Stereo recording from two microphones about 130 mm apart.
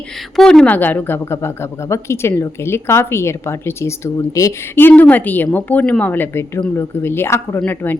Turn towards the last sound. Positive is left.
turn(degrees=15)  # may be behind; listen again after turning